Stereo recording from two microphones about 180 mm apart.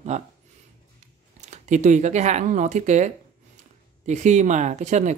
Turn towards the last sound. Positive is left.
turn(degrees=-40)  # may be behind; listen again after turning